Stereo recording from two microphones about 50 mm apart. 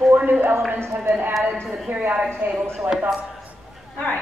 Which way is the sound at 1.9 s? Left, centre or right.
Right.